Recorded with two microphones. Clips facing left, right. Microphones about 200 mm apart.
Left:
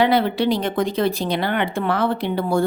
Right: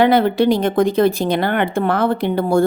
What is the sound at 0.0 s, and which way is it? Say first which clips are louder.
A woman's voice: right 4 dB; 50° right (ahead or behind).